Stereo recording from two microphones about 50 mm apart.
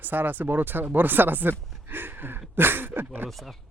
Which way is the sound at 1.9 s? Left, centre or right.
Right.